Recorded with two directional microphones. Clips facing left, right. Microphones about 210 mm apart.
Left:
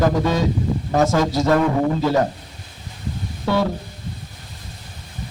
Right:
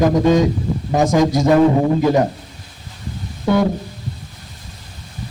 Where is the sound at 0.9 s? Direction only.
15° right (ahead or behind).